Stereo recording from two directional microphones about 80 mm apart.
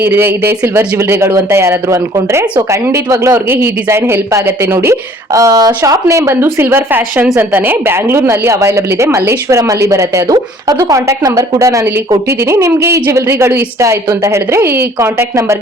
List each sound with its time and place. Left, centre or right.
0.0 s a woman's voice: right
6.6 s a woman's voice: right